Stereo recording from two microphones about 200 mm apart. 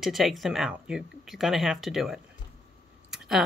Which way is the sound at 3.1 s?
Centre (ahead or behind).